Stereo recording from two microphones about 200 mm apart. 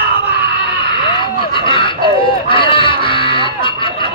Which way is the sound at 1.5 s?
25° left (ahead or behind).